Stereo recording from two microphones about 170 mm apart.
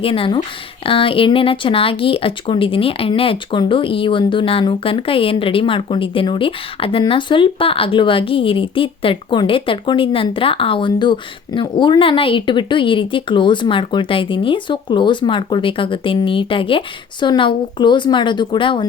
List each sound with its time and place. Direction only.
0.0 s speech: 30° left (ahead or behind)